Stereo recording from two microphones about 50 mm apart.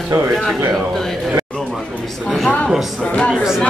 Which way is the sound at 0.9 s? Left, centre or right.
Centre.